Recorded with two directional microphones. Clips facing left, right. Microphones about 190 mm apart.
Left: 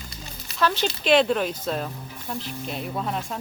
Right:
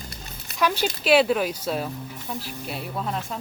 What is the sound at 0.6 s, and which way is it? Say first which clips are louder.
A woman's voice: even; 10° right (ahead or behind).